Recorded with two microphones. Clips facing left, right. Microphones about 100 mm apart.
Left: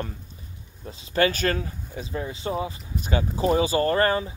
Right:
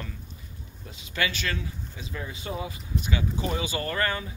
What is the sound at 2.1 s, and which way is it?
Speech, 30° left (ahead or behind).